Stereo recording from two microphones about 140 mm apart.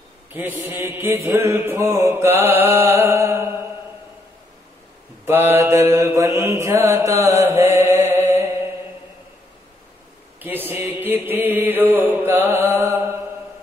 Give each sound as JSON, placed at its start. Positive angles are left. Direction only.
{"t": 0.3, "sound": "mantra", "side_deg": -15}
{"t": 5.2, "sound": "mantra", "side_deg": -15}
{"t": 7.2, "sound": "chant", "side_deg": -20}
{"t": 10.4, "sound": "mantra", "side_deg": -15}